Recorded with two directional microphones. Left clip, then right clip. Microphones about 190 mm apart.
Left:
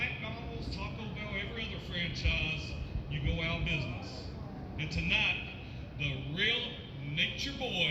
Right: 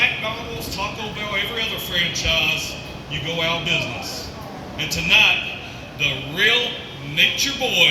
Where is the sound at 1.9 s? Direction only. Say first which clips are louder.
Right 15 dB; 25° right (ahead or behind).